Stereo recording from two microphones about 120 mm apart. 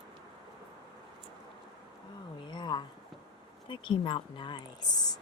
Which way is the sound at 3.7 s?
45° left (ahead or behind).